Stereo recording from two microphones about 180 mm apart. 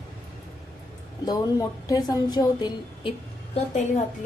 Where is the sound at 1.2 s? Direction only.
20° left (ahead or behind).